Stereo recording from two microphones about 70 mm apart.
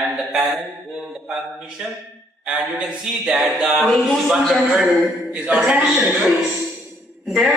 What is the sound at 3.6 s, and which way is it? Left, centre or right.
A woman's voice, centre.